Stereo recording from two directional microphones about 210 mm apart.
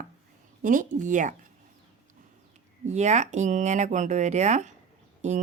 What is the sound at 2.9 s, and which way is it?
Speech, 35° right (ahead or behind).